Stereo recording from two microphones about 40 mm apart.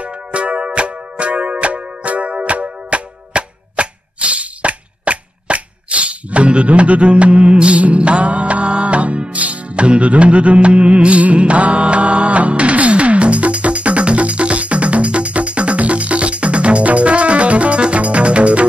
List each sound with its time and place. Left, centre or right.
0.0 s music: right